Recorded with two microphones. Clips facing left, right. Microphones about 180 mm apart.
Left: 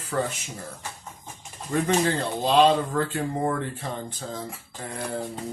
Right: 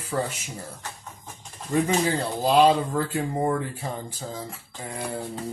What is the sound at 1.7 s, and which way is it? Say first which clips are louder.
Speech: even; 5° right (ahead or behind).